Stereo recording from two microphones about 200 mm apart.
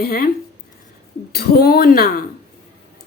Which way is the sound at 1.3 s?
50° left (ahead or behind).